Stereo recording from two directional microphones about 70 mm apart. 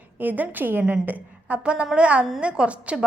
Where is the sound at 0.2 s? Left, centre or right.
Right.